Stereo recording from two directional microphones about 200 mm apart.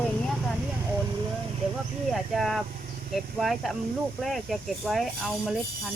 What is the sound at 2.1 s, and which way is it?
Speech, centre (ahead or behind).